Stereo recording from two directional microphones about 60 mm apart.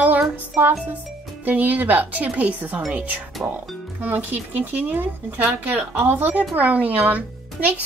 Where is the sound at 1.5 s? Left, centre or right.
Right.